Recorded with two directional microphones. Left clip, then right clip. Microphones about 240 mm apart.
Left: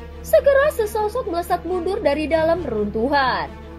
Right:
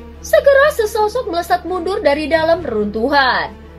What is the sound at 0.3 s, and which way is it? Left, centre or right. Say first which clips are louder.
A woman's voice: right 5 dB; left.